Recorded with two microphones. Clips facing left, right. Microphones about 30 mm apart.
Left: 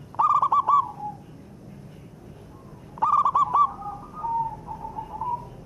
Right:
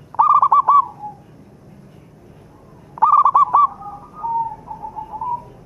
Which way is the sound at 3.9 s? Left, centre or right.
Centre.